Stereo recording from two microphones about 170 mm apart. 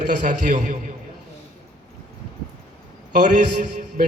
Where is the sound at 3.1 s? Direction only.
45° right (ahead or behind).